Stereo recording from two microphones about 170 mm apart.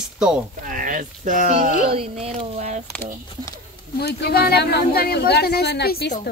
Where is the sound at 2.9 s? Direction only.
15° left (ahead or behind).